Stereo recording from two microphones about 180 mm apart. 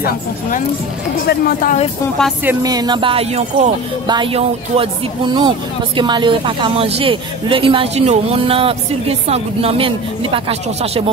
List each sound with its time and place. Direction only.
0.0 s speech: 45° left (ahead or behind)
1.2 s speech: 60° left (ahead or behind)
2.4 s speech: 20° right (ahead or behind)